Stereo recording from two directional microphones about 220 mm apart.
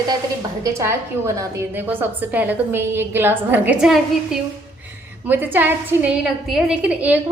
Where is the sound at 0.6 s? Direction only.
15° right (ahead or behind).